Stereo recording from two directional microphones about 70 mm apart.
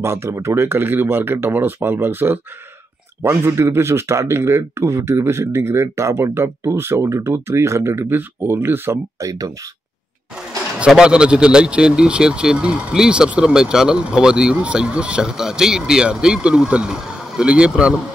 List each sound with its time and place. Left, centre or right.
0.0 s speech: right
3.2 s speech: right
8.1 s speech: right
10.9 s speech: centre